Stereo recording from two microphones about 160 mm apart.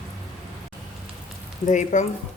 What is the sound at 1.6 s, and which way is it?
Speech, 50° left (ahead or behind).